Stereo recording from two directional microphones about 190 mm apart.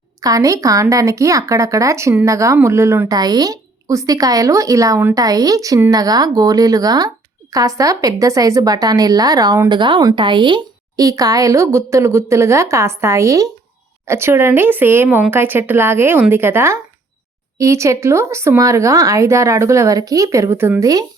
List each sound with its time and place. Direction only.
0.2 s a woman's voice: 20° right (ahead or behind)